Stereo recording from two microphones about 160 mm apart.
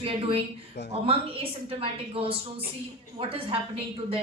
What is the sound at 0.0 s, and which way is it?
A woman's voice, 35° right (ahead or behind).